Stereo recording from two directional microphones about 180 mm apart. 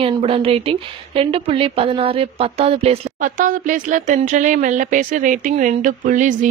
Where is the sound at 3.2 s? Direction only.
50° right (ahead or behind).